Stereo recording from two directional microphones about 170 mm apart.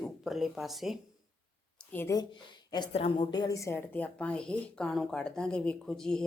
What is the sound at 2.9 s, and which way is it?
Speech, 30° left (ahead or behind).